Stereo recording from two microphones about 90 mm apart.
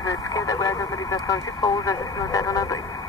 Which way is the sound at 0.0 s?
40° left (ahead or behind).